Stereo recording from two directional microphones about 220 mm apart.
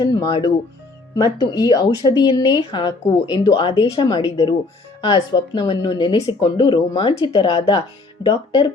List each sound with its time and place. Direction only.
0.0 s speech: 20° left (ahead or behind)